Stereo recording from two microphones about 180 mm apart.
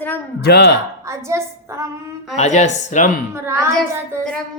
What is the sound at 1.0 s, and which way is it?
Speech, 15° right (ahead or behind).